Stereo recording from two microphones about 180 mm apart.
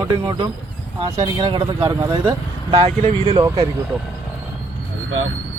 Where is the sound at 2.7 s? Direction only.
30° right (ahead or behind).